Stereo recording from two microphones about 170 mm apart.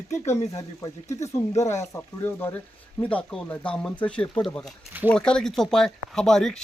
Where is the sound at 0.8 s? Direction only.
20° left (ahead or behind).